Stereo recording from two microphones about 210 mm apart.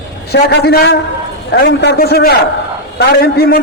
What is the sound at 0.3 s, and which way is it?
A man's voice, 50° left (ahead or behind).